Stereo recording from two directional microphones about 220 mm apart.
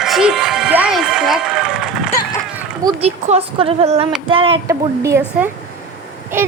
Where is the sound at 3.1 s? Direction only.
30° right (ahead or behind).